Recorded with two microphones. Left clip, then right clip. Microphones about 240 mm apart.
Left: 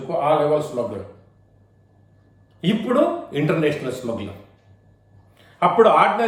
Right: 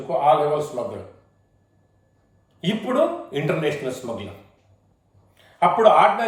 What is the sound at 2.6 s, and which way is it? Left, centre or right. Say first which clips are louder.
A man's voice: left 2 dB; centre.